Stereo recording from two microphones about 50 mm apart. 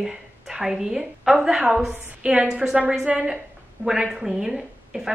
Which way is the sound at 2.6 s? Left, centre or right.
Centre.